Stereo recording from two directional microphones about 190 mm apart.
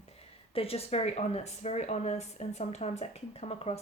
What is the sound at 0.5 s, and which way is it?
A woman's voice, 30° left (ahead or behind).